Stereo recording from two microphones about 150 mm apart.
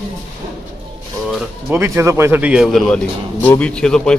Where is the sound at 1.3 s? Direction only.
5° right (ahead or behind).